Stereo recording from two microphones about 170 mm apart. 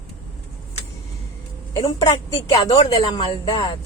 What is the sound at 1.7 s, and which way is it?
Speech, 20° left (ahead or behind).